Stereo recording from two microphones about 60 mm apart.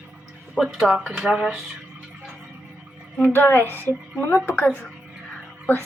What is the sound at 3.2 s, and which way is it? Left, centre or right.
Speech, left.